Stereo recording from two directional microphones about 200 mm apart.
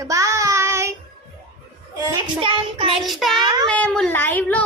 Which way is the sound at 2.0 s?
15° right (ahead or behind).